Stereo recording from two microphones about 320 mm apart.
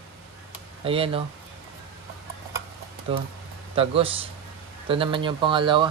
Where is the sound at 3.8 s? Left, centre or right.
Centre.